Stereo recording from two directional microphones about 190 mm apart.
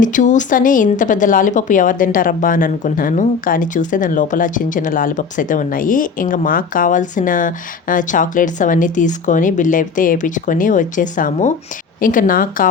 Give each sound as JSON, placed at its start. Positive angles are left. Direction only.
{"t": 0.0, "sound": "a woman's voice", "side_deg": 40}